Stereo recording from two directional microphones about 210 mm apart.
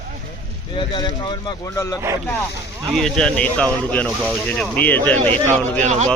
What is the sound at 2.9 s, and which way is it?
Speech, centre (ahead or behind).